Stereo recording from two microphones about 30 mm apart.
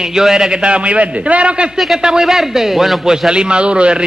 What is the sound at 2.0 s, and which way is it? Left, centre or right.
Speech, centre.